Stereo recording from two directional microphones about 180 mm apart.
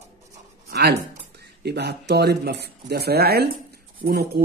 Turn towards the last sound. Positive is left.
turn(degrees=-60)  # may be behind; listen again after turning